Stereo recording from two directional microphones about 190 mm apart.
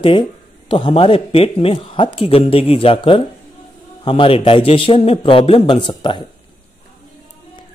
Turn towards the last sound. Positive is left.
turn(degrees=25)  # may be behind; listen again after turning